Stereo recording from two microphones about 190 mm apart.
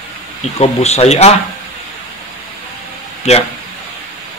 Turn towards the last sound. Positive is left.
turn(degrees=35)  # may be behind; listen again after turning